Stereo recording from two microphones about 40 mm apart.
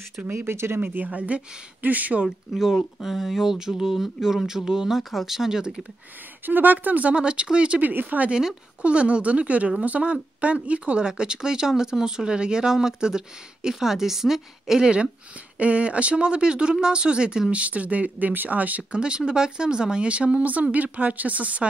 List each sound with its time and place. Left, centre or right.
0.3 s speech: right
0.7 s speech: right
1.1 s speech: right
2.5 s speech: centre
6.4 s speech: right
7.2 s speech: right
7.8 s speech: right
8.3 s speech: centre
8.8 s speech: right; by 14.9 s centre
15.6 s speech: right
18.9 s speech: right